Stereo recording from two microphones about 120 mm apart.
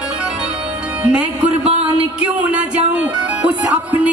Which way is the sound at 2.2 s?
10° right (ahead or behind).